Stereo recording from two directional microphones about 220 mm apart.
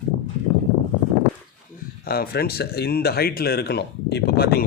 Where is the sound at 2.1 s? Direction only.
45° left (ahead or behind).